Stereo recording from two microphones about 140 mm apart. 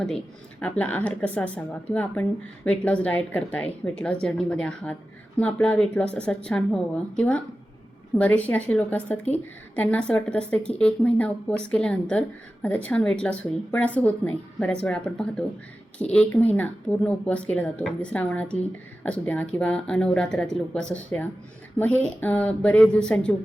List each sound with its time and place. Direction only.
0.6 s a woman's voice: 10° left (ahead or behind)